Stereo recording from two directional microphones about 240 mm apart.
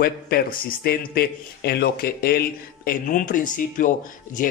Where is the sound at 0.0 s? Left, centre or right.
Left.